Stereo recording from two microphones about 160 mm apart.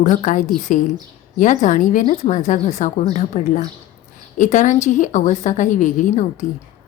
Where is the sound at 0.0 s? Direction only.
50° left (ahead or behind).